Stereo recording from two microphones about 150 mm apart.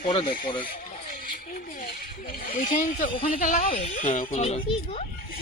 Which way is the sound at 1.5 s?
70° left (ahead or behind).